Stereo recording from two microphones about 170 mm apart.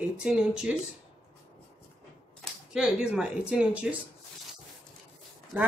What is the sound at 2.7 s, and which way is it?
Speech, 5° right (ahead or behind).